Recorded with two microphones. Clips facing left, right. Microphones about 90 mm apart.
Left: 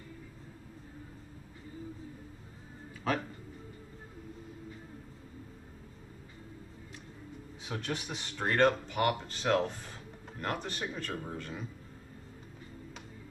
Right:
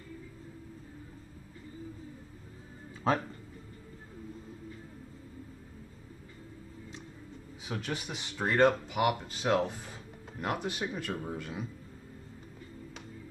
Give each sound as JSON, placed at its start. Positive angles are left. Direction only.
{"t": 3.1, "sound": "speech", "side_deg": -25}
{"t": 7.6, "sound": "a man's voice", "side_deg": -5}